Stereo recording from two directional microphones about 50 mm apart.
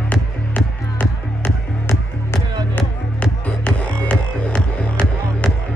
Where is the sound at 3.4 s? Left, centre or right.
Left.